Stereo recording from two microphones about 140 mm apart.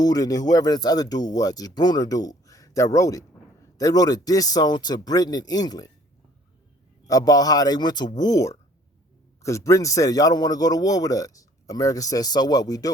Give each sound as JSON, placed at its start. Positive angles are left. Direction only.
{"t": 0.0, "sound": "a man's voice", "side_deg": 25}
{"t": 7.1, "sound": "a man's voice", "side_deg": 25}